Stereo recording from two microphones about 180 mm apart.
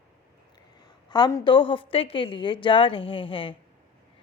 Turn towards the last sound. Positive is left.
turn(degrees=30)  # may be behind; listen again after turning